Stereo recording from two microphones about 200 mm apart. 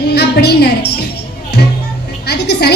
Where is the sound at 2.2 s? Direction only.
55° left (ahead or behind).